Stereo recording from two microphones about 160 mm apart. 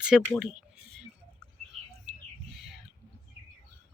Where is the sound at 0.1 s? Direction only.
Centre (ahead or behind).